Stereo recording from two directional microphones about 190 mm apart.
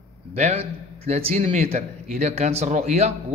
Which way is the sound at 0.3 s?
35° right (ahead or behind).